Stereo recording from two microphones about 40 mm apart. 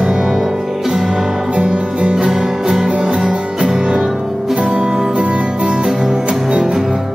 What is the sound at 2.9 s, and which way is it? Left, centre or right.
Music, right.